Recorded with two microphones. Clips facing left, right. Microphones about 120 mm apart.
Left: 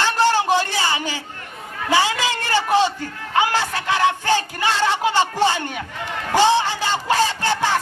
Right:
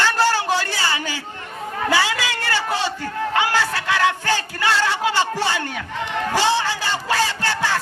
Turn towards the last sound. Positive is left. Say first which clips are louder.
# left 2 dB
turn(degrees=20)  # may be behind; listen again after turning